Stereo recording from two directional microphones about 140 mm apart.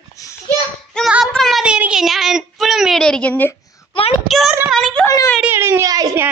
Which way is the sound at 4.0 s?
40° left (ahead or behind).